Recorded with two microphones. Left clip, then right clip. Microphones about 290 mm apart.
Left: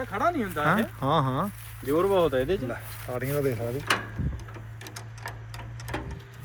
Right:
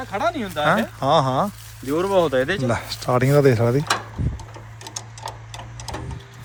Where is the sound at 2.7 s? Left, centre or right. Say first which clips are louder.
Right 13 dB; right.